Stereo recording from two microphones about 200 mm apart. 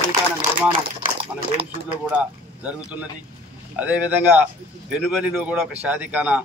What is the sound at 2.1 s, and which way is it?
Speech, 5° right (ahead or behind).